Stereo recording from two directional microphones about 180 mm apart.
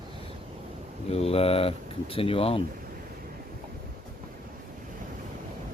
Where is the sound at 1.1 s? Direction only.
35° left (ahead or behind).